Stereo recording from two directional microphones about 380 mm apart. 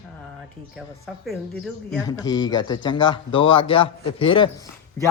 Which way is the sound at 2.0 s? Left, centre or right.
Centre.